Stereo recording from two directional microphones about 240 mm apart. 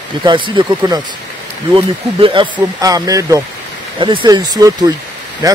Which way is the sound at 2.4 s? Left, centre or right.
Centre.